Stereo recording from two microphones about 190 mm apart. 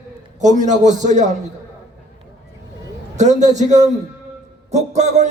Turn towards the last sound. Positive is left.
turn(degrees=-35)  # may be behind; listen again after turning